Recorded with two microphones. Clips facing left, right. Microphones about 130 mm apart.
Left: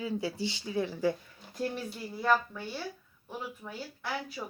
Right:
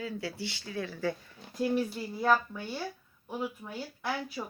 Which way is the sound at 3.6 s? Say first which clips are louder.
Right 1 dB; 5° right (ahead or behind).